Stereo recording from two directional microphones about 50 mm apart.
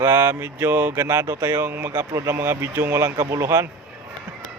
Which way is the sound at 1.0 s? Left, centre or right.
Right.